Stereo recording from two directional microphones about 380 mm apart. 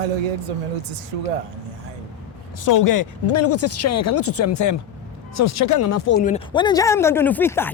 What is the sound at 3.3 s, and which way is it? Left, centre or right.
Speech, left.